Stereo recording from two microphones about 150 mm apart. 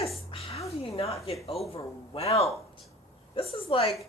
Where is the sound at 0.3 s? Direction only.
40° left (ahead or behind).